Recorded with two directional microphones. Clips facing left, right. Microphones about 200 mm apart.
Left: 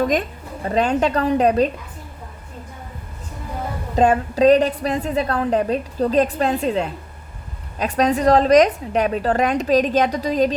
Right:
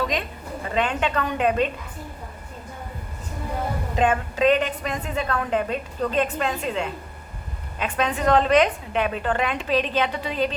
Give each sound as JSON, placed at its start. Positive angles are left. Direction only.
{"t": 0.0, "sound": "a woman's voice", "side_deg": 45}
{"t": 3.9, "sound": "a woman's voice", "side_deg": 40}